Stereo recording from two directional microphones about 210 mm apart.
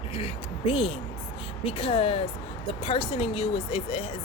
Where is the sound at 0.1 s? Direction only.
25° left (ahead or behind).